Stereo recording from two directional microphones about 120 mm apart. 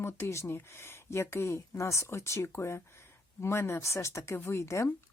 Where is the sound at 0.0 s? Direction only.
20° left (ahead or behind).